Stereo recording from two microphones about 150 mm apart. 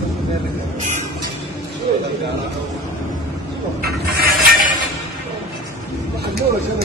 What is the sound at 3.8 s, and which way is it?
Mechanisms, 90° right.